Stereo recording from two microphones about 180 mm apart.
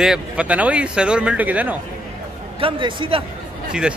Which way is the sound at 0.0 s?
5° right (ahead or behind).